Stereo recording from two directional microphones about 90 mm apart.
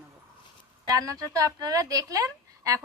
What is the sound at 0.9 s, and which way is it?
A woman's voice, 40° right (ahead or behind).